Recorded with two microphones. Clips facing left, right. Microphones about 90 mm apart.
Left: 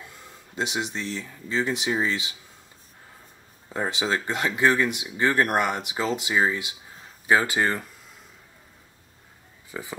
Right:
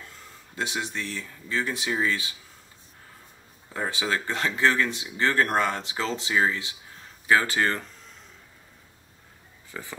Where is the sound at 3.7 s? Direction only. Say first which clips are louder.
Left 2 dB; 20° left (ahead or behind).